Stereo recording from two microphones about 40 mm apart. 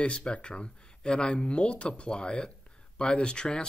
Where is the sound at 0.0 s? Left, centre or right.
Left.